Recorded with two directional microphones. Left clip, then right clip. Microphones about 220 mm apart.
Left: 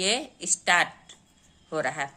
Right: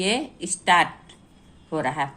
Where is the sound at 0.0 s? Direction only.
20° left (ahead or behind).